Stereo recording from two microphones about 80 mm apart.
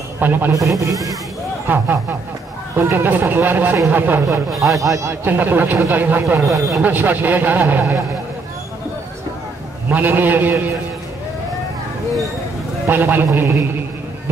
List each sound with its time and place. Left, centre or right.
0.2 s speech: right
0.5 s speech: right
1.7 s speech: right
4.7 s speech: right
5.2 s speech: right
6.4 s speech: centre
6.8 s speech: right
9.8 s speech: right
12.8 s speech: right